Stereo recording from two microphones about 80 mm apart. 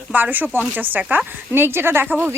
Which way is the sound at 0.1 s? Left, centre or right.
Right.